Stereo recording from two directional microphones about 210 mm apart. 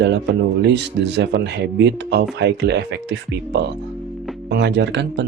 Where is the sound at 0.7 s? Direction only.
55° right (ahead or behind).